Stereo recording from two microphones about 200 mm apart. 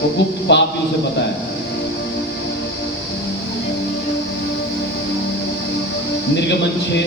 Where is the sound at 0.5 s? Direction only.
60° left (ahead or behind).